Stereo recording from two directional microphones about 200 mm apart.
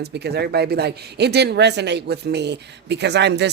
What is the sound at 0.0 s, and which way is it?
Speech, 55° right (ahead or behind).